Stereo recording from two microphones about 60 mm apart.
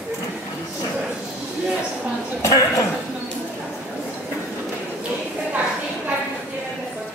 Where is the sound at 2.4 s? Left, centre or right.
Left.